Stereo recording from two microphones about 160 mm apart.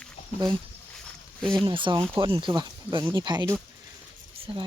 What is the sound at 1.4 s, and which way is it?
Speech, 5° left (ahead or behind).